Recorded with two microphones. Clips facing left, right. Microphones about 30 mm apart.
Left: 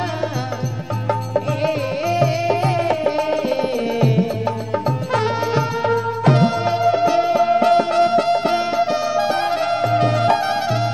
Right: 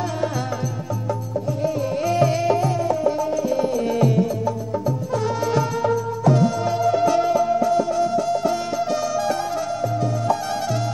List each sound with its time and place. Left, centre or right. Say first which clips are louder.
2.0 s music: left 1 dB; left
2.5 s music: left 2 dB; left
3.5 s music: left 1 dB; left
4.5 s music: left 3 dB; left
5.5 s music: left 2 dB; left
6.2 s music: left 2 dB; left
7.4 s music: left 4 dB; left
8.9 s music: left 3 dB; left